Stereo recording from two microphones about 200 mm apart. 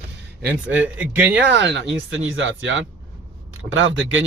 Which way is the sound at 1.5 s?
60° right (ahead or behind).